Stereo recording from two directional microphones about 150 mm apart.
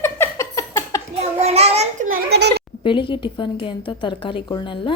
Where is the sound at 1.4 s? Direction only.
45° right (ahead or behind).